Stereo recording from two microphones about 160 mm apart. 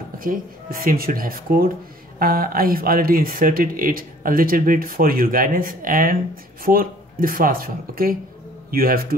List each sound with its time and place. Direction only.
0.2 s a man's voice: 65° right (ahead or behind)